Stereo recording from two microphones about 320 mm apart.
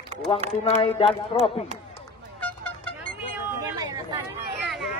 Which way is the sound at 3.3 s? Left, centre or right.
Centre.